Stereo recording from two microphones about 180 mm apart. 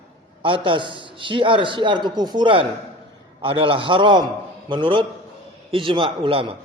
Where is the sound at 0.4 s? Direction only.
30° right (ahead or behind).